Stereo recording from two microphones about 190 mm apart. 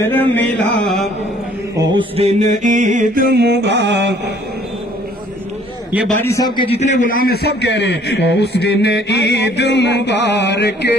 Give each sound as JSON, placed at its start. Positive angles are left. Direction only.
{"t": 0.0, "sound": "a sound", "side_deg": 10}
{"t": 0.4, "sound": "music", "side_deg": 5}
{"t": 1.8, "sound": "mantra", "side_deg": -25}
{"t": 3.3, "sound": "music", "side_deg": -60}
{"t": 6.2, "sound": "a man's voice", "side_deg": 20}